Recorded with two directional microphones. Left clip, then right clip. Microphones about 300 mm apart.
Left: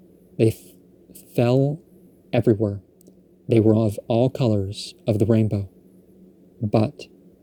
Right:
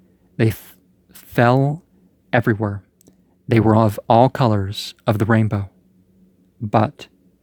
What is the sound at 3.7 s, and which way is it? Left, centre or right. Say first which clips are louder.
Speech: right 6 dB; right.